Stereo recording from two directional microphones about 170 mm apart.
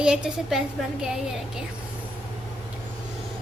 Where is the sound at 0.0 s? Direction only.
5° right (ahead or behind).